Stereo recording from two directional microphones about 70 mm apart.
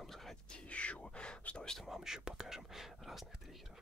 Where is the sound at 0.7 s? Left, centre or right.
Centre.